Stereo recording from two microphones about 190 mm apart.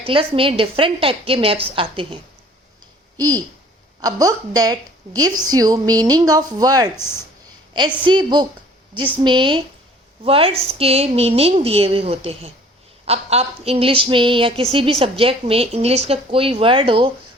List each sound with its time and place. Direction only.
0.1 s speech: 30° right (ahead or behind)
3.2 s a woman's voice: 20° right (ahead or behind)
8.0 s a woman's voice: 25° right (ahead or behind)